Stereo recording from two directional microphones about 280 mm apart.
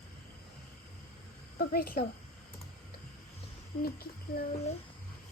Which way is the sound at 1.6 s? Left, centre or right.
Left.